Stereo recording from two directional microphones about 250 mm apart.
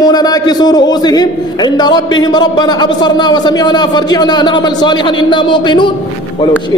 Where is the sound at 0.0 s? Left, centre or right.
Centre.